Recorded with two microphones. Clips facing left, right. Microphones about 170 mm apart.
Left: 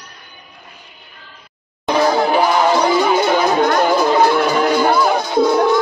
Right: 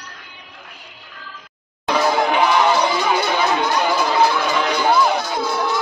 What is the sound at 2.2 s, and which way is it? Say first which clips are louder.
Music: left 2 dB; 40° left (ahead or behind).